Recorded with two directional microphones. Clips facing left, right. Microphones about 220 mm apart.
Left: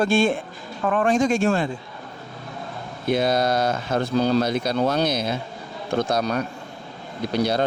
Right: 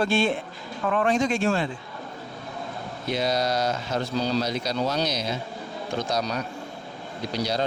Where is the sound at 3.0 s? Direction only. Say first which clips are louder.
Left 5 dB; 55° left (ahead or behind).